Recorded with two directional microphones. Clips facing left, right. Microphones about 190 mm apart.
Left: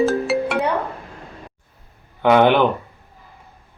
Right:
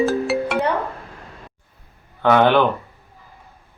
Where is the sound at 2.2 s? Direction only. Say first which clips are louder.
Left 1 dB; 15° left (ahead or behind).